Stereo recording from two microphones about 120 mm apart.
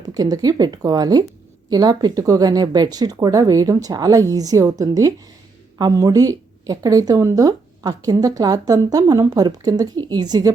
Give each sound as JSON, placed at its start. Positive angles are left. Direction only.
{"t": 0.0, "sound": "speech", "side_deg": -35}